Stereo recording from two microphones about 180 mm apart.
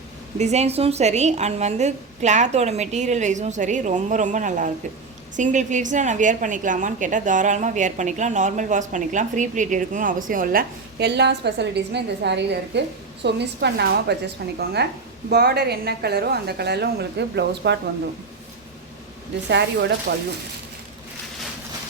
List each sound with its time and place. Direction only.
0.3 s a woman's voice: 40° right (ahead or behind); by 17.7 s 70° right (ahead or behind)
19.5 s a woman's voice: 70° right (ahead or behind)